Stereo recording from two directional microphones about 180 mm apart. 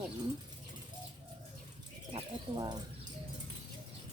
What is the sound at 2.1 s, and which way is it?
Speech, 25° right (ahead or behind).